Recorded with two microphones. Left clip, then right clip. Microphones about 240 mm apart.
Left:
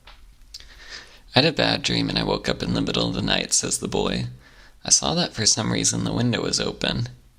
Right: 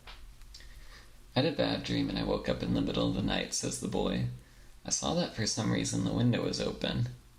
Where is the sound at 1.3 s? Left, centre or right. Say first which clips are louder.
Left 11 dB; left.